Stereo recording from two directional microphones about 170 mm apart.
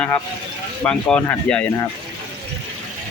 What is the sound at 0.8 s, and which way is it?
Speech, 5° left (ahead or behind).